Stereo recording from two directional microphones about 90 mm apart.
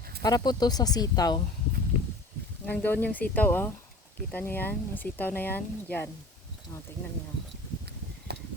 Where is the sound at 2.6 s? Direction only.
20° left (ahead or behind).